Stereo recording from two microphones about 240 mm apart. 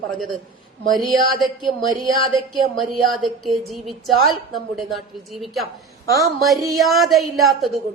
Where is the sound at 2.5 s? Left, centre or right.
Centre.